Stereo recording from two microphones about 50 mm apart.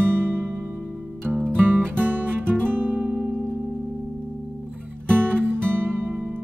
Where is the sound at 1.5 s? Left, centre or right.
Right.